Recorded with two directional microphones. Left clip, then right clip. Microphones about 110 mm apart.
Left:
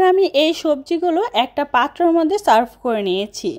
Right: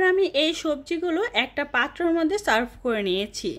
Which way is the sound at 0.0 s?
50° left (ahead or behind).